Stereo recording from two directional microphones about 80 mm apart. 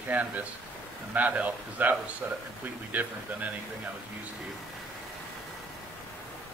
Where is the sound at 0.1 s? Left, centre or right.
Right.